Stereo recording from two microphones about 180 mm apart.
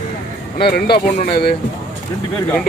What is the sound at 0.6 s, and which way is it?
Speech, 60° left (ahead or behind).